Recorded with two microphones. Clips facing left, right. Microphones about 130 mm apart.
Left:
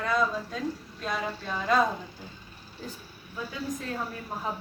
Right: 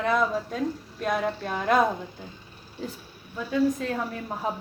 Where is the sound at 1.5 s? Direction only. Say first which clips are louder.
Right 2 dB; 60° right (ahead or behind).